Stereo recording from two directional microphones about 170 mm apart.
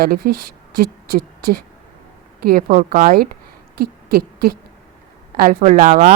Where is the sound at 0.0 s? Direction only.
60° right (ahead or behind).